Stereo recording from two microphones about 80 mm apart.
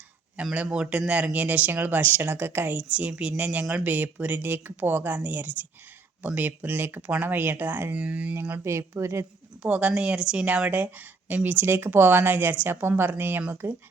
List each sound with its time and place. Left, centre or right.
0.5 s speech: centre
8.4 s speech: right
9.6 s speech: centre